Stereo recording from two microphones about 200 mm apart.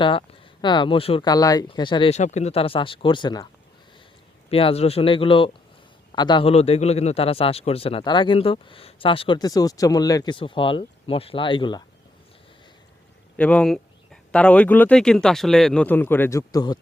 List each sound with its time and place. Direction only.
0.0 s a man's voice: 25° left (ahead or behind)
4.5 s a man's voice: 30° left (ahead or behind)
13.3 s speech: 5° left (ahead or behind)